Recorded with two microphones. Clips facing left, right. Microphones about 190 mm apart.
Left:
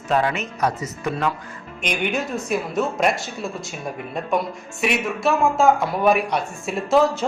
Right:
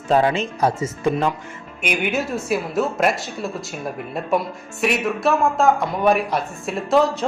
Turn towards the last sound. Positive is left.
turn(degrees=0)  # may be behind; listen again after turning